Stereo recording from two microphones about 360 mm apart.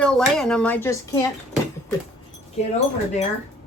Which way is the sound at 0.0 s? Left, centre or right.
Centre.